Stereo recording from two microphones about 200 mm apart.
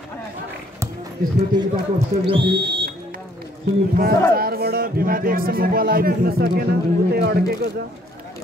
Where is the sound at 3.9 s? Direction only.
50° right (ahead or behind).